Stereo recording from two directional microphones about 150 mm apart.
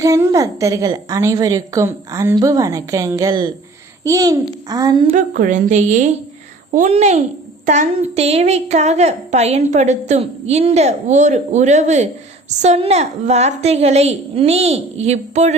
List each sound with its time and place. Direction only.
0.0 s a woman's voice: 20° right (ahead or behind)
5.1 s a woman's voice: 65° right (ahead or behind); by 15.5 s 45° right (ahead or behind)